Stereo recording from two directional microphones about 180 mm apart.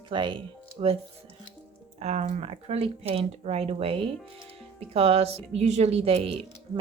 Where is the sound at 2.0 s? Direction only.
40° right (ahead or behind).